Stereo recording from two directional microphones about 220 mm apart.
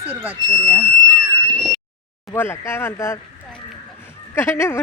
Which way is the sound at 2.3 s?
10° left (ahead or behind).